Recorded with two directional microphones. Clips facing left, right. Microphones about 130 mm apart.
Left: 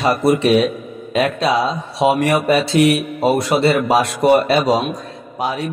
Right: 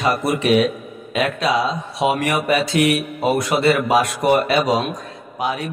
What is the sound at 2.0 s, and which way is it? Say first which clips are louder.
A man's voice: left 4 dB; 35° left (ahead or behind).